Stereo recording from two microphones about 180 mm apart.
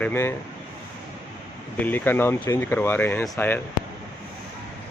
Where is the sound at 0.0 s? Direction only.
10° left (ahead or behind).